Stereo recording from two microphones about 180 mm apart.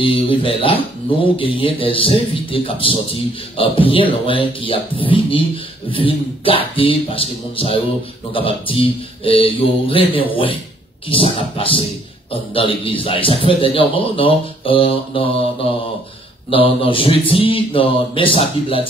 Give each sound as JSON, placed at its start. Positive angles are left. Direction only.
{"t": 0.0, "sound": "a man's voice", "side_deg": 30}
{"t": 16.4, "sound": "a man's voice", "side_deg": 30}